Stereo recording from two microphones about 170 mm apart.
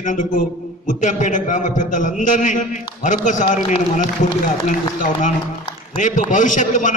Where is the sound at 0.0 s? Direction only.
50° left (ahead or behind).